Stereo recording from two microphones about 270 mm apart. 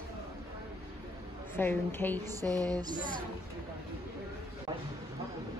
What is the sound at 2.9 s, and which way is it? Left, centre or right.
Speech, right.